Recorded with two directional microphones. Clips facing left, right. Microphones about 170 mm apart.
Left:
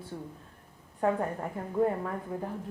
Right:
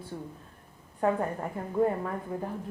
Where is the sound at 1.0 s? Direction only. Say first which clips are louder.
Right 1 dB; 20° right (ahead or behind).